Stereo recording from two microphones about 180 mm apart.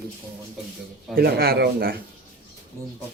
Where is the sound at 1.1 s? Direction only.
55° right (ahead or behind).